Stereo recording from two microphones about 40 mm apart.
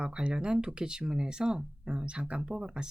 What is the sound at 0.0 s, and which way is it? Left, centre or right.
Speech, right.